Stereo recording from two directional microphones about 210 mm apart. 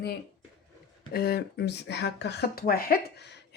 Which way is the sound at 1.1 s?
45° left (ahead or behind).